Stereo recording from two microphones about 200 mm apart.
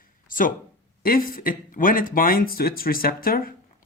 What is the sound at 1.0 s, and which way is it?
Speech, 45° left (ahead or behind).